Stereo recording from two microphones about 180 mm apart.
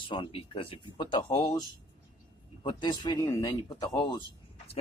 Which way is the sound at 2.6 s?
25° left (ahead or behind).